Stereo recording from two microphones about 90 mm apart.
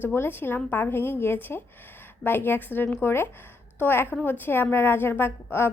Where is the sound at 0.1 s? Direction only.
25° left (ahead or behind).